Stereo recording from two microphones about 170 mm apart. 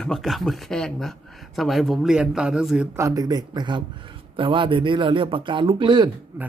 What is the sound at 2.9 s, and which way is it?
Speech, 20° right (ahead or behind).